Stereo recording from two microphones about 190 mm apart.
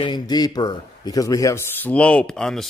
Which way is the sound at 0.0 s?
20° left (ahead or behind).